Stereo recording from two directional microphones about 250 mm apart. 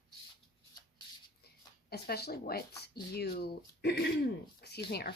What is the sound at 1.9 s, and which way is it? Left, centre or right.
Speech, left.